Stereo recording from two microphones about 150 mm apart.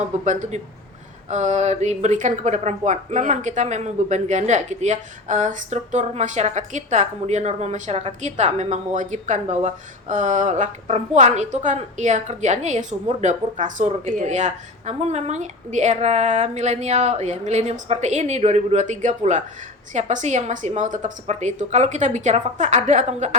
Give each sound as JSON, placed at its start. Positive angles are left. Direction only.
{"t": 0.3, "sound": "speech", "side_deg": -55}